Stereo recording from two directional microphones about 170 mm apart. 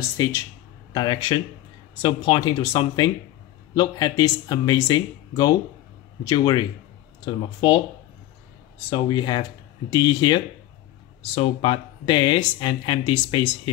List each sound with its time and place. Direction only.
0.0 s speech: 20° left (ahead or behind)
8.9 s speech: 25° left (ahead or behind)